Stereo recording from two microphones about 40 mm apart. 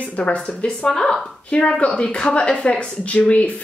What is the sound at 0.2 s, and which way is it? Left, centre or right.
Speech, left.